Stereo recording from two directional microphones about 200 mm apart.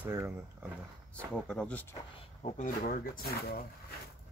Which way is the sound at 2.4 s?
40° left (ahead or behind).